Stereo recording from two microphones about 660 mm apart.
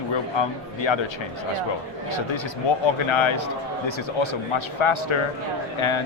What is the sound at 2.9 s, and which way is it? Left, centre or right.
A man's voice, left.